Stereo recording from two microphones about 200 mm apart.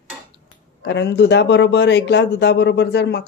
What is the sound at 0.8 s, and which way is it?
Speech, 60° left (ahead or behind).